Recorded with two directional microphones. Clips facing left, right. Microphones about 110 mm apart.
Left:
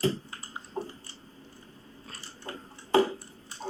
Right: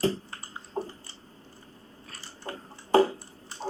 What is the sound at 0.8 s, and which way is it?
Chewing, 30° right (ahead or behind).